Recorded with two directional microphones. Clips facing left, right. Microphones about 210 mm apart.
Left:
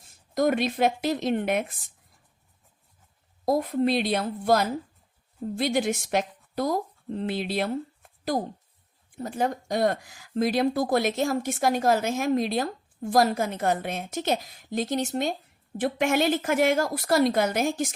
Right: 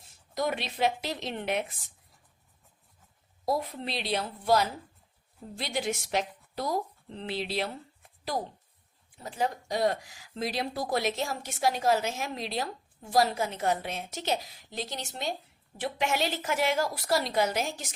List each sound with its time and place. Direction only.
0.3 s speech: 50° left (ahead or behind)
3.4 s speech: 50° left (ahead or behind)